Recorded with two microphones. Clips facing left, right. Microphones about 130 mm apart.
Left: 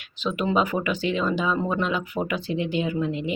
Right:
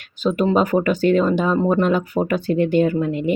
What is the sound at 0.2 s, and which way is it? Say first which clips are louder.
Speech: right 6 dB; 40° right (ahead or behind).